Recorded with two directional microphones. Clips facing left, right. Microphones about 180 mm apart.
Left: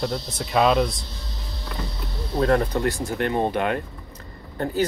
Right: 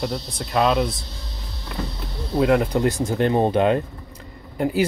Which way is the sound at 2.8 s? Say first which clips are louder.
Right 4 dB; 25° right (ahead or behind).